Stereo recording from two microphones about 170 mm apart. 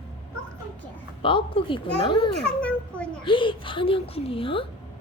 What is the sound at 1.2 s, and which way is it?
Speech, 30° left (ahead or behind).